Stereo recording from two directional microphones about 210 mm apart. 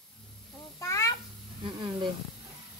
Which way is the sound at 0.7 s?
15° left (ahead or behind).